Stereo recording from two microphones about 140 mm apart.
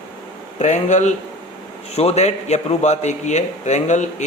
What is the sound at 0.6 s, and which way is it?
A man's voice, 60° left (ahead or behind).